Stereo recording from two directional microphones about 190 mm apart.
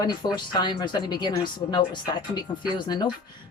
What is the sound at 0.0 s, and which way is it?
Speech, 20° left (ahead or behind).